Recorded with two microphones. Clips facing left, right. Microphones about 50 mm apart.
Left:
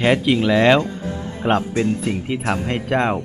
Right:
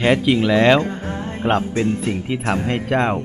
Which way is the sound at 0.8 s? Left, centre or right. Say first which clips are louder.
Right 1 dB; right.